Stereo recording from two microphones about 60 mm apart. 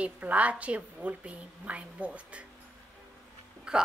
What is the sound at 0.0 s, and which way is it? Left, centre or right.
A woman's voice, right.